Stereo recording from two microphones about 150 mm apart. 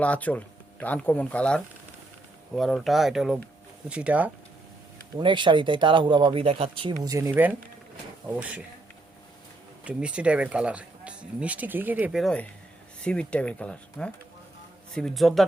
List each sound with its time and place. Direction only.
0.0 s speech: 10° left (ahead or behind); by 4.3 s 10° right (ahead or behind)
5.2 s speech: 30° right (ahead or behind); by 8.6 s 10° right (ahead or behind)
9.8 s speech: 5° right (ahead or behind)
12.2 s speech: 10° left (ahead or behind)